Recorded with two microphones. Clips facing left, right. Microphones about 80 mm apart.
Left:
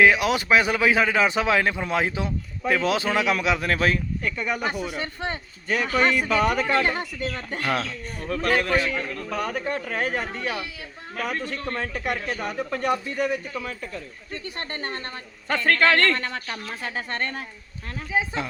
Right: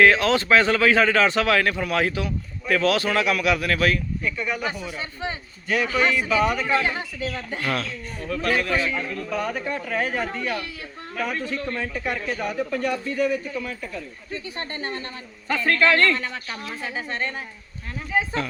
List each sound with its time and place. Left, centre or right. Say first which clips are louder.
0.0 s a man's voice: right 1 dB; centre
4.4 s a man's voice: left 1 dB; left
5.6 s speech: right 2 dB; left
5.9 s a man's voice: left 2 dB; left
8.2 s a man's voice: left 1 dB; left
14.7 s a man's voice: even; left
18.1 s speech: right 1 dB; centre